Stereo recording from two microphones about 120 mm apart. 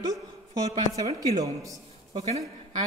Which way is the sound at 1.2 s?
30° right (ahead or behind).